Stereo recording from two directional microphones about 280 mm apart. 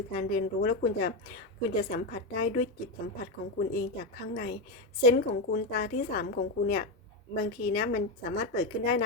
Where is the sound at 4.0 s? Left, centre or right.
Left.